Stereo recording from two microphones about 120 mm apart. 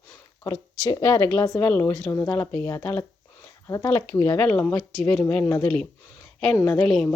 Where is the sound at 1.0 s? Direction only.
20° left (ahead or behind).